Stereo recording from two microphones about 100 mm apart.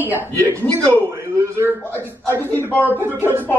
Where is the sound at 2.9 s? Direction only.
20° right (ahead or behind).